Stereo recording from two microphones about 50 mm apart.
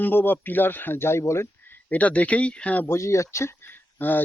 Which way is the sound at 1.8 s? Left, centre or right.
Left.